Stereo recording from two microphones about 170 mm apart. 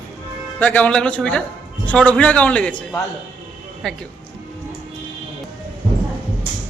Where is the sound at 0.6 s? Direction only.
10° left (ahead or behind).